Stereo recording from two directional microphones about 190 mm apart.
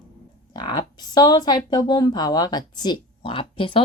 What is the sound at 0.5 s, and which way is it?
Speech, 20° left (ahead or behind).